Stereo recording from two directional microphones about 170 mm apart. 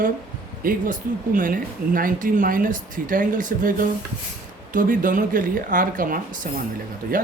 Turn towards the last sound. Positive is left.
turn(degrees=-50)  # may be behind; listen again after turning